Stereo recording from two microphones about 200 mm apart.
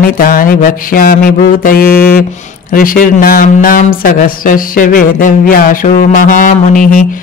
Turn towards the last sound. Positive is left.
turn(degrees=40)  # may be behind; listen again after turning